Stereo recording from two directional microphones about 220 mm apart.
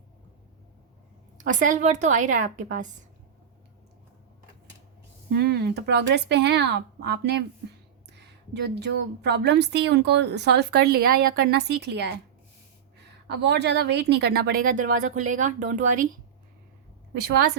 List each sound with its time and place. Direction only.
1.4 s a woman's voice: 35° right (ahead or behind)
5.3 s a woman's voice: 45° right (ahead or behind)
13.2 s a woman's voice: 50° right (ahead or behind)